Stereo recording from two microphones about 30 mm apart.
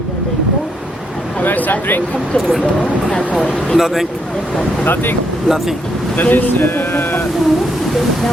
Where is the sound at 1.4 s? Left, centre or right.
Left.